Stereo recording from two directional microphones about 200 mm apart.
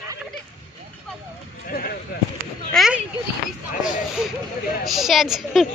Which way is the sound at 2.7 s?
Centre (ahead or behind).